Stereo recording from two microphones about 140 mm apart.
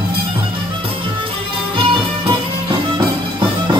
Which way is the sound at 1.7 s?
40° right (ahead or behind).